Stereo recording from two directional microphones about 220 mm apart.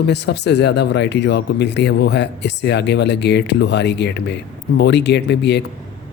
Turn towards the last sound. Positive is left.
turn(degrees=50)  # may be behind; listen again after turning